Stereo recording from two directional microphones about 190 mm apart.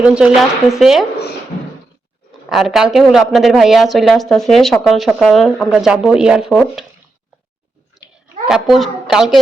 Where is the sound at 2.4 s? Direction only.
Centre (ahead or behind).